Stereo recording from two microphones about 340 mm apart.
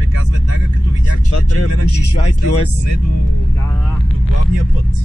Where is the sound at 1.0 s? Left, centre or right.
Left.